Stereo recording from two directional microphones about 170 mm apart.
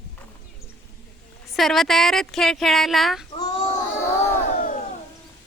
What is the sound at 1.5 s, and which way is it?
A woman's voice, centre (ahead or behind).